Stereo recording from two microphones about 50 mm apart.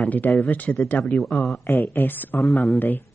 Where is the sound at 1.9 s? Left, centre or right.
Left.